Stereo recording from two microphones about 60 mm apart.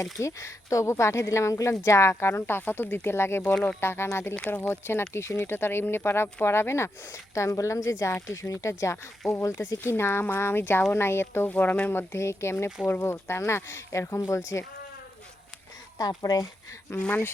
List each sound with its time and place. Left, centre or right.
0.0 s speech: left
16.0 s speech: left
16.9 s speech: left